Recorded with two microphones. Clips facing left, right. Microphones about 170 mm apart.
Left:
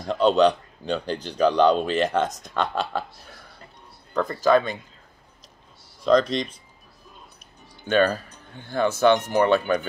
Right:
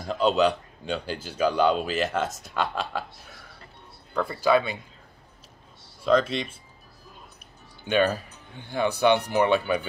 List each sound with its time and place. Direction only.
0.0 s speech: 5° right (ahead or behind)
6.0 s speech: 5° right (ahead or behind)
7.8 s speech: 15° right (ahead or behind)